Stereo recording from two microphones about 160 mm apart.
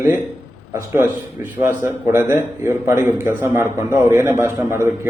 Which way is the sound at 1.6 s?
15° right (ahead or behind).